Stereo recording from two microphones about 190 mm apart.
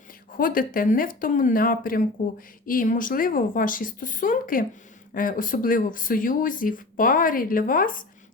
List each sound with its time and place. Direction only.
0.3 s speech: 50° left (ahead or behind)